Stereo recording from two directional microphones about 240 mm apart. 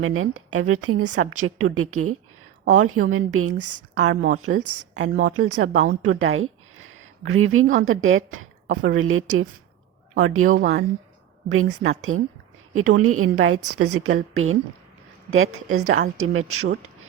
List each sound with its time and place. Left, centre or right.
0.0 s a woman's voice: right
10.6 s a woman's voice: right
11.5 s a woman's voice: right